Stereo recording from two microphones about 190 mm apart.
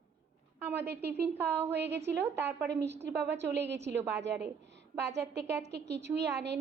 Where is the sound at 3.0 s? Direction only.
65° right (ahead or behind).